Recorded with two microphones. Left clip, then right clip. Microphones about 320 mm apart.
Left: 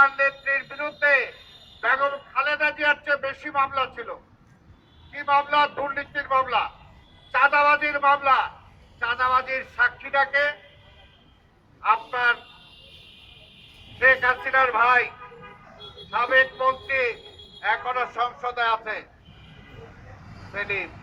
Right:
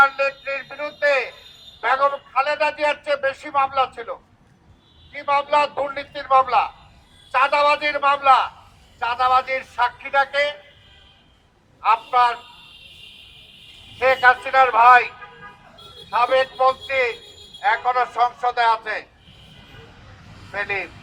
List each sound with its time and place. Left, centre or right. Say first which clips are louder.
0.0 s a man's voice: right 2 dB; centre
5.2 s a man's voice: right 2 dB; centre
14.0 s a man's voice: right 3 dB; centre
16.0 s a man's voice: right 2 dB; centre
20.5 s speech: right 3 dB; centre